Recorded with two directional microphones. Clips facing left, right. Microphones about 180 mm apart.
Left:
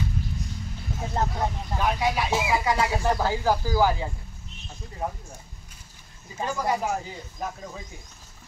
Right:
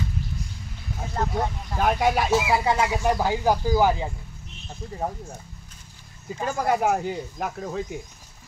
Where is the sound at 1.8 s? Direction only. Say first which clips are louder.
Right 4 dB; 50° right (ahead or behind).